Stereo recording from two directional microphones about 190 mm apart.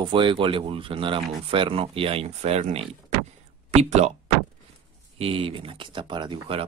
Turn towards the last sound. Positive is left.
turn(degrees=-25)  # may be behind; listen again after turning